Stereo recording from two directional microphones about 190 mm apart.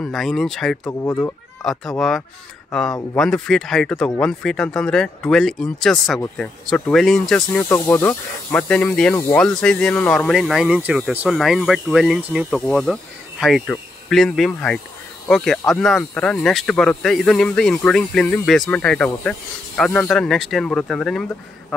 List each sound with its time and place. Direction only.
0.0 s speech: centre (ahead or behind)
0.8 s speech: 15° left (ahead or behind)
1.6 s speech: centre (ahead or behind)